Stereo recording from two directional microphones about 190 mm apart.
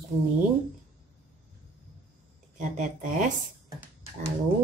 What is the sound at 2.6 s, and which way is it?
Speech, 40° right (ahead or behind).